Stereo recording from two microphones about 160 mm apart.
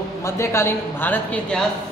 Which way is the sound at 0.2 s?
15° left (ahead or behind).